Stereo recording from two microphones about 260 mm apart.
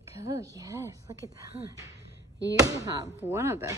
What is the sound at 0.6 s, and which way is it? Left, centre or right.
Speech, centre.